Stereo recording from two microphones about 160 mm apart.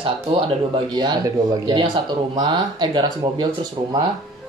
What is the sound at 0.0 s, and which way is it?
Speech, 40° right (ahead or behind).